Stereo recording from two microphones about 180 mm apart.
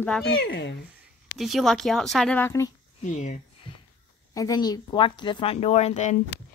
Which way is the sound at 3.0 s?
40° left (ahead or behind).